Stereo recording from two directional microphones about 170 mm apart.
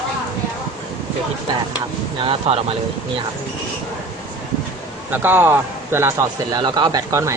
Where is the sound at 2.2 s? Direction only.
35° right (ahead or behind).